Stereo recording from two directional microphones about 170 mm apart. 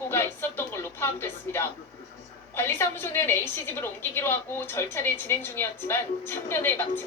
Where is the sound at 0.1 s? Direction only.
15° left (ahead or behind).